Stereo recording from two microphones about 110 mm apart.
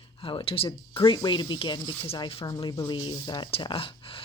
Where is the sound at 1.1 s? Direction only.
40° left (ahead or behind).